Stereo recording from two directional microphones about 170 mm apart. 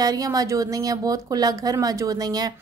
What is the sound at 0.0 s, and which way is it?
A woman's voice, 20° right (ahead or behind).